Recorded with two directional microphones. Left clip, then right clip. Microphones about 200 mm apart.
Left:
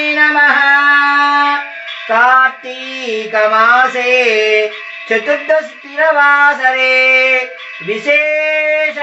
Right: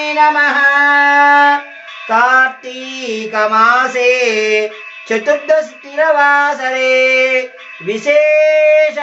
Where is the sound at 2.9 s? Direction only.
55° right (ahead or behind).